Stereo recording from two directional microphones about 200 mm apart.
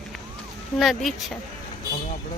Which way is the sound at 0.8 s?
Centre (ahead or behind).